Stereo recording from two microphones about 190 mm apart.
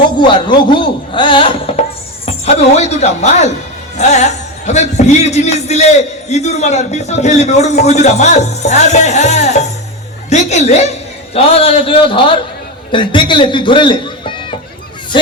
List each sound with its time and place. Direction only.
0.2 s a woman's voice: 25° left (ahead or behind)